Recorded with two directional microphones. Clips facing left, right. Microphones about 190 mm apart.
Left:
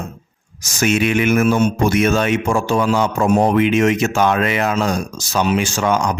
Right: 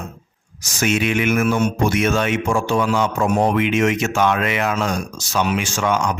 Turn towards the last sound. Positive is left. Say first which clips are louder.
# left 2 dB
turn(degrees=35)  # may be behind; listen again after turning